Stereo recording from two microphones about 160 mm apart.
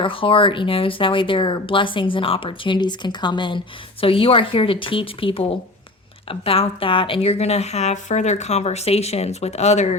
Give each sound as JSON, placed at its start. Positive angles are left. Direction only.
{"t": 0.0, "sound": "speech", "side_deg": 35}